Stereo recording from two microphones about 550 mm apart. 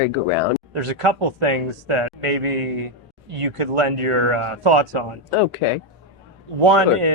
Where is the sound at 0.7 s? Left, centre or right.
Right.